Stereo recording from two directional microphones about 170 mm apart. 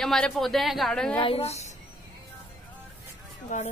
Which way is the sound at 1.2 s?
35° left (ahead or behind).